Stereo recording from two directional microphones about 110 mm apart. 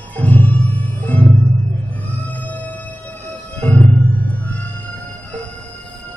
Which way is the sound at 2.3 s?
15° left (ahead or behind).